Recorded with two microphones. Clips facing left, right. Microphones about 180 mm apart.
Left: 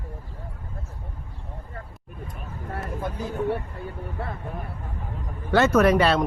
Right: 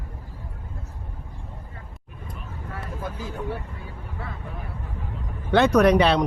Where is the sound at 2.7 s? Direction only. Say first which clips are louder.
Left 3 dB; 45° left (ahead or behind).